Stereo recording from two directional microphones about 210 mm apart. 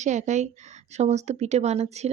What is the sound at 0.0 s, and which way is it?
A woman's voice, 35° right (ahead or behind).